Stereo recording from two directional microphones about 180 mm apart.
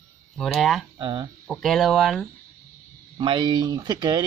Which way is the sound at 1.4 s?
Centre (ahead or behind).